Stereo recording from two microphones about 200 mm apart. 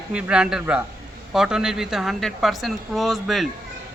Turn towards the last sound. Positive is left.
turn(degrees=0)  # may be behind; listen again after turning